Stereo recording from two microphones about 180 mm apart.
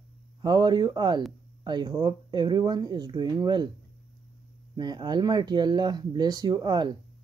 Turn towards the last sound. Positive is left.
turn(degrees=-25)  # may be behind; listen again after turning